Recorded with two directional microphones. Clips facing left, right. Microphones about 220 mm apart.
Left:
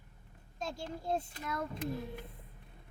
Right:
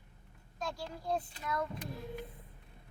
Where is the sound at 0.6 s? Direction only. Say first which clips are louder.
Left 1 dB; 25° left (ahead or behind).